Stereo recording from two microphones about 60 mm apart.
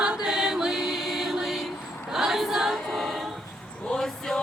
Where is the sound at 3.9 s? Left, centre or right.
Centre.